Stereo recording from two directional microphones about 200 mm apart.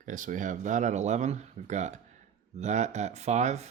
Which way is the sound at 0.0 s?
40° right (ahead or behind).